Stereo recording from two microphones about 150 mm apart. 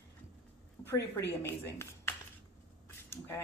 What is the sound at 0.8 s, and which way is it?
Speech, 15° left (ahead or behind).